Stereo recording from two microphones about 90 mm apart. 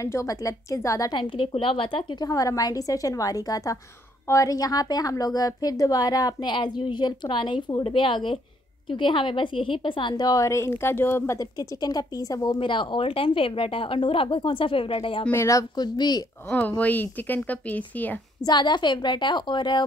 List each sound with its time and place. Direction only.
0.0 s a woman's voice: 35° left (ahead or behind)
1.1 s a woman's voice: 65° left (ahead or behind)
2.2 s a woman's voice: 40° left (ahead or behind)
11.3 s a woman's voice: 50° left (ahead or behind)
12.5 s a woman's voice: 65° left (ahead or behind)
15.3 s a woman's voice: 35° left (ahead or behind)
15.7 s a woman's voice: 50° left (ahead or behind)
16.4 s a woman's voice: 20° left (ahead or behind)
18.4 s a woman's voice: 55° left (ahead or behind)